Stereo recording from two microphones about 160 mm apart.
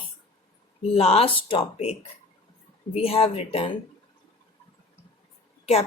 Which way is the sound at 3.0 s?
35° left (ahead or behind).